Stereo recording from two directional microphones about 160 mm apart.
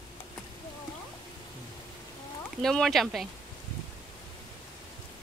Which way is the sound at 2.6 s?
5° left (ahead or behind).